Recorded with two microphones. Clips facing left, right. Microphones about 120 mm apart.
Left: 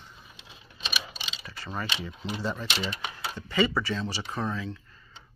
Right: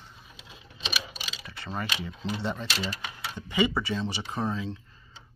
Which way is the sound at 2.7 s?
40° right (ahead or behind).